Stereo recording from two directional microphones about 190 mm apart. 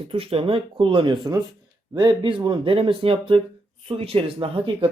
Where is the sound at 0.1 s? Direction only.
30° right (ahead or behind).